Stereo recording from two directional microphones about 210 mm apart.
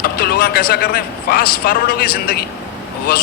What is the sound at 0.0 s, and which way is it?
A man's voice, 45° left (ahead or behind).